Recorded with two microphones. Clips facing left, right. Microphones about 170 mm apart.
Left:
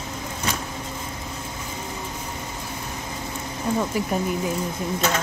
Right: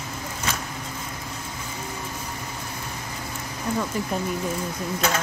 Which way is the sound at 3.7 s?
10° left (ahead or behind).